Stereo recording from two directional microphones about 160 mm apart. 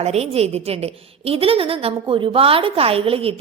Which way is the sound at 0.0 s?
40° right (ahead or behind).